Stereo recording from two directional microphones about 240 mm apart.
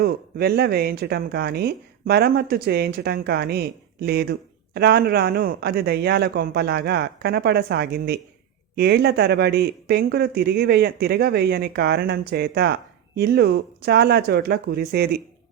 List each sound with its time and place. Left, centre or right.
0.0 s speech: right